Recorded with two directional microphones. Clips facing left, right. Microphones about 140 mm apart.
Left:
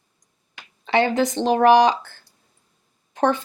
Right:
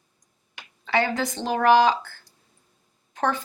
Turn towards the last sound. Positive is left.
turn(degrees=20)  # may be behind; listen again after turning